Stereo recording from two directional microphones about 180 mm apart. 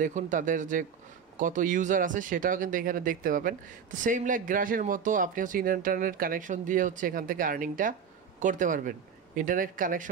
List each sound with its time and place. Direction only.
0.0 s speech: 45° right (ahead or behind)